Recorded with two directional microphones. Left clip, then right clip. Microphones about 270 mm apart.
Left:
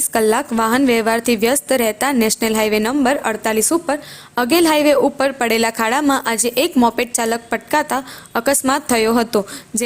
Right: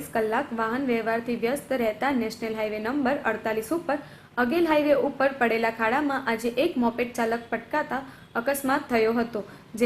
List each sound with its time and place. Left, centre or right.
0.1 s a woman's voice: left